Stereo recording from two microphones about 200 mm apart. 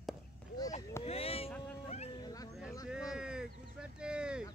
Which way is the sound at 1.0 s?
30° left (ahead or behind).